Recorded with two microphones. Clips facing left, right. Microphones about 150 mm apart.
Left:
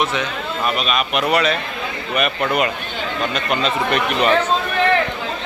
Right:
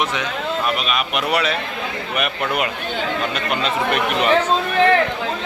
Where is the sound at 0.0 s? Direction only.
15° right (ahead or behind).